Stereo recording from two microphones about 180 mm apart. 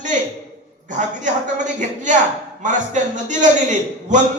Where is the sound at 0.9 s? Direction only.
45° right (ahead or behind).